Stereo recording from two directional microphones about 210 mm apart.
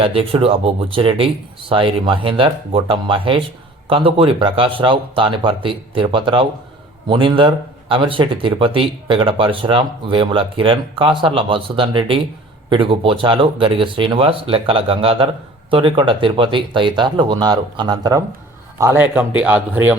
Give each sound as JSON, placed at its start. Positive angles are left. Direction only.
{"t": 0.0, "sound": "speech", "side_deg": -25}